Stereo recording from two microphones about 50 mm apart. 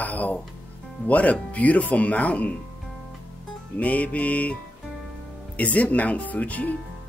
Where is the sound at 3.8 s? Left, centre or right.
Left.